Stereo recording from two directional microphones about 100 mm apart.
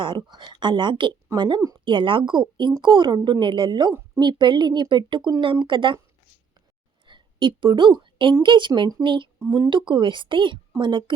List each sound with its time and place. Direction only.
0.3 s speech: 50° right (ahead or behind)
7.1 s a woman's voice: 55° right (ahead or behind)
9.4 s speech: 35° right (ahead or behind)
9.6 s speech: 55° right (ahead or behind)